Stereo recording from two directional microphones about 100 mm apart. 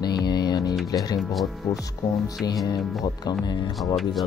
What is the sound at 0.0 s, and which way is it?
Music, 45° left (ahead or behind).